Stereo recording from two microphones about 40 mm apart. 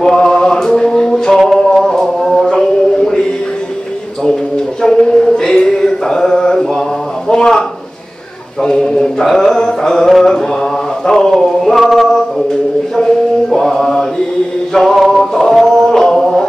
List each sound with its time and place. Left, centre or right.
0.0 s mantra: centre
1.4 s music: centre
4.8 s a sound: centre
8.6 s a sound: centre
9.3 s music: centre
11.1 s a sound: centre
11.7 s male singing: centre
12.9 s chant: centre
14.7 s music: centre